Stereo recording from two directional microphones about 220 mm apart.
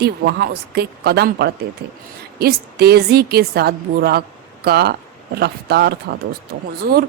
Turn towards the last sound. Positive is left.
turn(degrees=-45)  # may be behind; listen again after turning